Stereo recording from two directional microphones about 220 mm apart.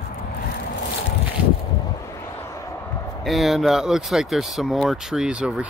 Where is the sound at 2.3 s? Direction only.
15° left (ahead or behind).